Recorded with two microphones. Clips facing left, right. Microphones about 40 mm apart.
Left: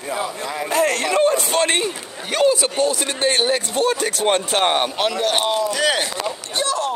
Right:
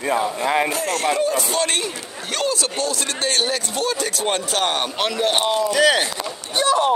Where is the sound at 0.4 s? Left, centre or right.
Right.